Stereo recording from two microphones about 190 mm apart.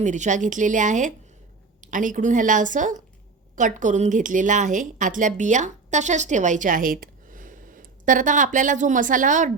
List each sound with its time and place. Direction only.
0.0 s a woman's voice: 40° right (ahead or behind)